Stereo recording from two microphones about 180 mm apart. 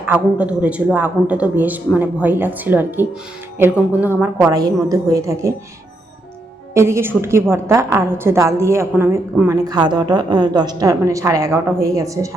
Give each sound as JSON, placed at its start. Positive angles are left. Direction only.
{"t": 0.1, "sound": "a woman's voice", "side_deg": -5}
{"t": 6.7, "sound": "a woman's voice", "side_deg": -15}